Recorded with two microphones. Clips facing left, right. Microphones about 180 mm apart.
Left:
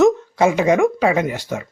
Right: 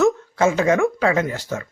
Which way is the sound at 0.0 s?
15° left (ahead or behind).